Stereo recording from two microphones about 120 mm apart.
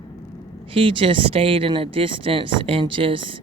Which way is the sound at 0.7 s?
45° right (ahead or behind).